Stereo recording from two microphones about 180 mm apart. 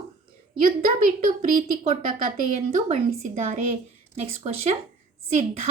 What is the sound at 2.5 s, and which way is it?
A woman's voice, 40° right (ahead or behind).